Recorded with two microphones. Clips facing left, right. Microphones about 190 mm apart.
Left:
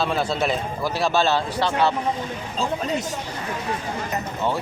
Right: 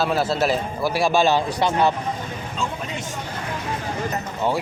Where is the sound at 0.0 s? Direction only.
5° right (ahead or behind).